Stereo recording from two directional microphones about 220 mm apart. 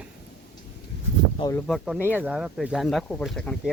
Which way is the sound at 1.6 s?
Centre (ahead or behind).